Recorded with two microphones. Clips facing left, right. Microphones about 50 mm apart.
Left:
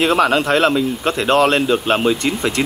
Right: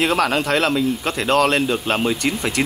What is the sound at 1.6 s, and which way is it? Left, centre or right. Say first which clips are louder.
Speech: left 4 dB; left.